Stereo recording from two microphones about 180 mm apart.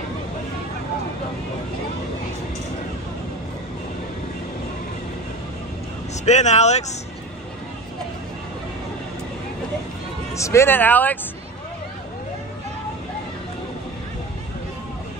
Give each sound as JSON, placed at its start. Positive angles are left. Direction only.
{"t": 6.2, "sound": "speech", "side_deg": 40}
{"t": 10.3, "sound": "speech", "side_deg": 15}